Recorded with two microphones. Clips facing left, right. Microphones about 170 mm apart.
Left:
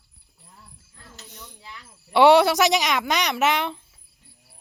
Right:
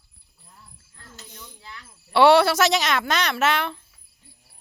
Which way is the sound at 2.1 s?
15° left (ahead or behind).